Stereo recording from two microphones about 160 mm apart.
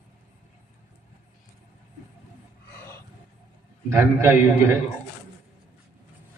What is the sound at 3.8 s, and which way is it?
Speech, 15° right (ahead or behind).